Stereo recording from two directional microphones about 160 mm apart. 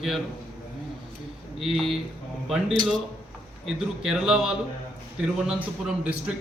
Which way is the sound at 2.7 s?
30° right (ahead or behind).